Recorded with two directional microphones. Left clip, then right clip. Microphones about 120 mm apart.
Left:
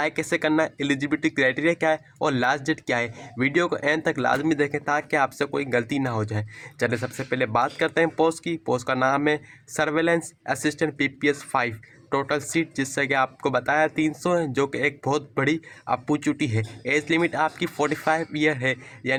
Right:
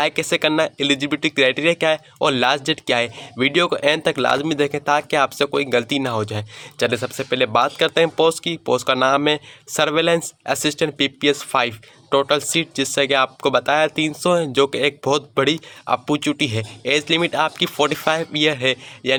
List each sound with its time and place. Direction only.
0.0 s speech: 25° right (ahead or behind)